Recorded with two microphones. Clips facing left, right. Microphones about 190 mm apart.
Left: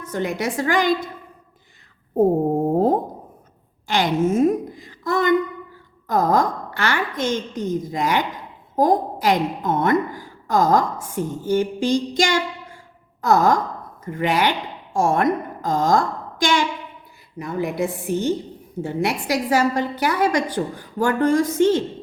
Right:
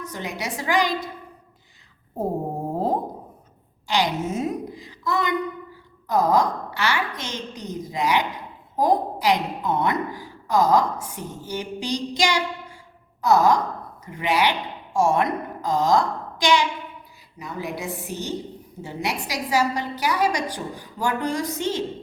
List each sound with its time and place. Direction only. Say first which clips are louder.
0.0 s a woman's voice: left 7 dB; 50° left (ahead or behind)
2.7 s a sound: left 4 dB; 50° left (ahead or behind)
3.8 s a woman's voice: left 4 dB; 50° left (ahead or behind)